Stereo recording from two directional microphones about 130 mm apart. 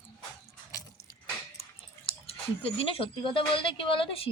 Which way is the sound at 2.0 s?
45° left (ahead or behind).